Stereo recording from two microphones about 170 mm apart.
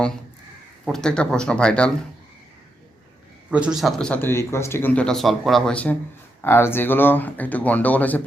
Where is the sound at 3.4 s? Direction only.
5° right (ahead or behind).